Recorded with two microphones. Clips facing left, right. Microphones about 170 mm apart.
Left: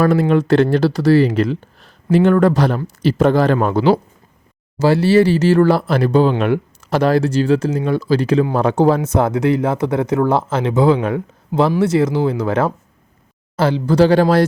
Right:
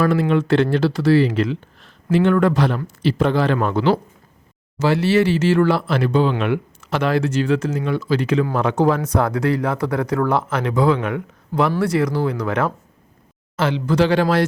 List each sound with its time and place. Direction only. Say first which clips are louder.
0.0 s speech: left 3 dB; 45° left (ahead or behind)